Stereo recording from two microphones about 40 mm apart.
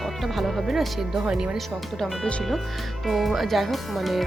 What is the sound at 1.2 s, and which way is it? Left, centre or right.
Speech, centre.